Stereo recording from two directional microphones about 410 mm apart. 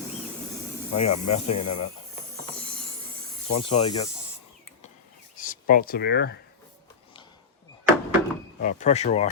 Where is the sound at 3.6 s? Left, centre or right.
Centre.